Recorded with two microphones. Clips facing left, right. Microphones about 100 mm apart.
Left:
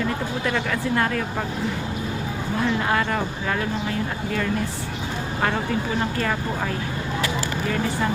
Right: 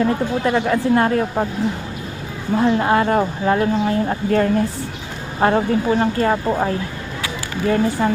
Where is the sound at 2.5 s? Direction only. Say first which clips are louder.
Right 7 dB; 30° right (ahead or behind).